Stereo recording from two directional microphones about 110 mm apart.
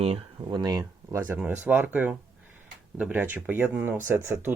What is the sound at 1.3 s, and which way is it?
Speech, 20° right (ahead or behind).